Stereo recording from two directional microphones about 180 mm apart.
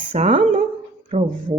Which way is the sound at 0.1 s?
35° right (ahead or behind).